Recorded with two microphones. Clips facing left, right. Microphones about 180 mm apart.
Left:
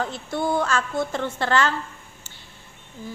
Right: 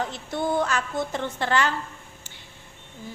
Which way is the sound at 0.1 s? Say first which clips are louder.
Left 1 dB; 15° right (ahead or behind).